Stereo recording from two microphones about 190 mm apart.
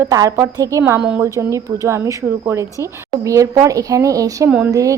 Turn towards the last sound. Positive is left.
turn(degrees=-5)  # may be behind; listen again after turning